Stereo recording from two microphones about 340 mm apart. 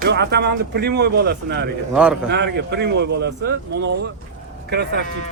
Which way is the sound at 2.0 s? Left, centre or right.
Centre.